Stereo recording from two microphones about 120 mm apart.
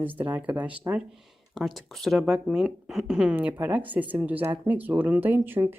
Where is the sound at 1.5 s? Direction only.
Centre (ahead or behind).